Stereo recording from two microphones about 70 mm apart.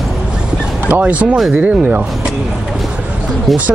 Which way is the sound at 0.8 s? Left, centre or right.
Right.